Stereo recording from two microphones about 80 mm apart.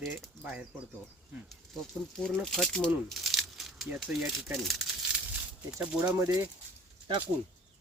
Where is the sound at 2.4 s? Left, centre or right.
Centre.